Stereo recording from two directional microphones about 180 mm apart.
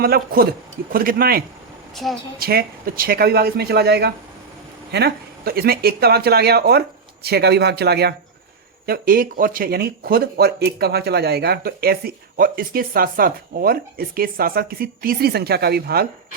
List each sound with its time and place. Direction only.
0.0 s speech: 55° right (ahead or behind)
2.0 s a woman's voice: centre (ahead or behind)
2.4 s speech: 60° right (ahead or behind)
8.9 s speech: 55° right (ahead or behind)